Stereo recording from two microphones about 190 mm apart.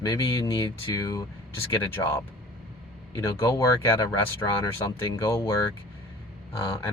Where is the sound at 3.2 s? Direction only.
15° left (ahead or behind).